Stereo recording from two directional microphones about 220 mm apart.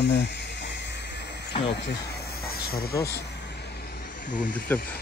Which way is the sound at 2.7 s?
45° left (ahead or behind).